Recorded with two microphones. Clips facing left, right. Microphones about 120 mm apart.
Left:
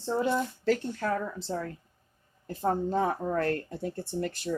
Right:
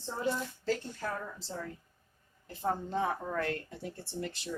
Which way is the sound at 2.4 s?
40° left (ahead or behind).